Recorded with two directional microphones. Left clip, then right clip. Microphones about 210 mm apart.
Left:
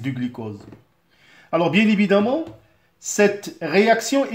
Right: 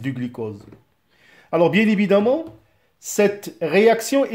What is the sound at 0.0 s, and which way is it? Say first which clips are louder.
Speech: right 1 dB; 45° right (ahead or behind).